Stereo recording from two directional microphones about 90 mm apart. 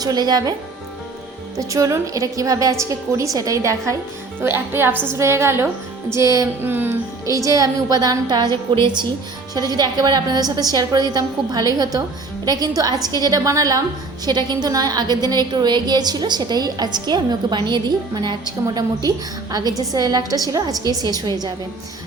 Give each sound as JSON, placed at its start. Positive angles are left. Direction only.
{"t": 0.0, "sound": "a woman's voice", "side_deg": -50}
{"t": 1.5, "sound": "a woman's voice", "side_deg": -35}
{"t": 4.4, "sound": "a woman's voice", "side_deg": -25}
{"t": 6.6, "sound": "speech", "side_deg": -25}
{"t": 7.3, "sound": "a woman's voice", "side_deg": -35}
{"t": 9.6, "sound": "a woman's voice", "side_deg": -50}
{"t": 14.3, "sound": "a woman's voice", "side_deg": -50}